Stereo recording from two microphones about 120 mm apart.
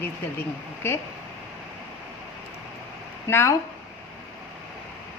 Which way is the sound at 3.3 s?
20° left (ahead or behind).